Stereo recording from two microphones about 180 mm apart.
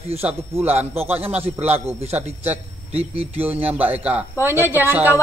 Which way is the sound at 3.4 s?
10° right (ahead or behind).